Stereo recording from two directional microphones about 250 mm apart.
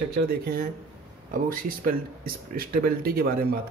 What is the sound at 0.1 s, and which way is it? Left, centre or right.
Speech, right.